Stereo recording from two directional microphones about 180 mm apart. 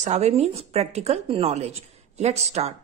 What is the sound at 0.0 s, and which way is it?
A woman's voice, 40° right (ahead or behind).